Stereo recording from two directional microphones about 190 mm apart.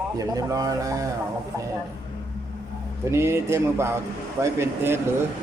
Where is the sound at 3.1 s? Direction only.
15° right (ahead or behind).